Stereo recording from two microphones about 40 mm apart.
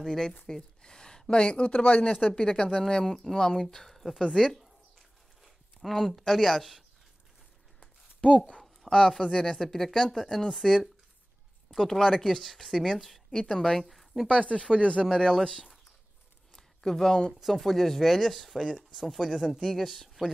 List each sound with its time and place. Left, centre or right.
0.0 s a woman's voice: centre; by 2.4 s left
2.4 s speech: centre
5.4 s speech: centre
8.9 s speech: centre
13.3 s a woman's voice: centre
14.2 s speech: left
15.0 s speech: centre
16.5 s a sound: centre
17.4 s speech: centre